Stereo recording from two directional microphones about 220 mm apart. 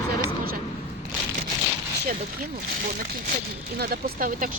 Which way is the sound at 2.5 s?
40° right (ahead or behind).